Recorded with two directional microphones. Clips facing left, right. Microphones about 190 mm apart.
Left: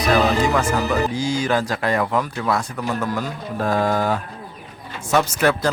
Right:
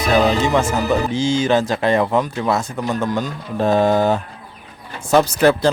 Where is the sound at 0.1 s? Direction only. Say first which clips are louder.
Right 2 dB; 25° right (ahead or behind).